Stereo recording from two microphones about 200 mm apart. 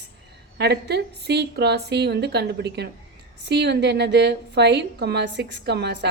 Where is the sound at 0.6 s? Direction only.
55° right (ahead or behind).